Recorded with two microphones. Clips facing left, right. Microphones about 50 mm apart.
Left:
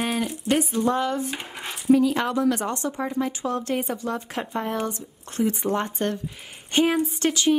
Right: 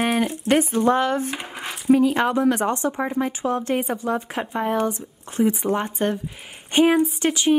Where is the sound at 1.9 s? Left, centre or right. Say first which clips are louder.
Right 2 dB; right.